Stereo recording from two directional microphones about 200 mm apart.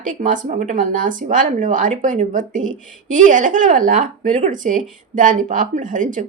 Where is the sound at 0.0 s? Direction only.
40° right (ahead or behind).